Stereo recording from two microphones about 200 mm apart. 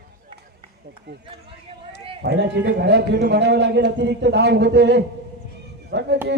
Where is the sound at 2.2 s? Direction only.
60° right (ahead or behind).